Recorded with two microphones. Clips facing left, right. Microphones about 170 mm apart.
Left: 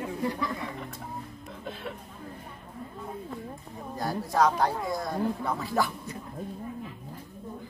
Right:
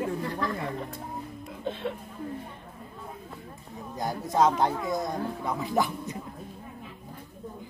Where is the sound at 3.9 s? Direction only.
20° right (ahead or behind).